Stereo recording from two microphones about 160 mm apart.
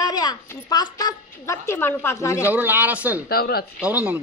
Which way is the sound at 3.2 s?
70° left (ahead or behind).